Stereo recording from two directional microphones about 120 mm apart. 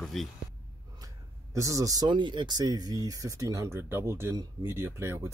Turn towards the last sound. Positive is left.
turn(degrees=-20)  # may be behind; listen again after turning